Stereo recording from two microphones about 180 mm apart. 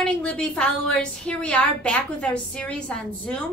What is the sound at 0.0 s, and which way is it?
A woman's voice, 5° left (ahead or behind).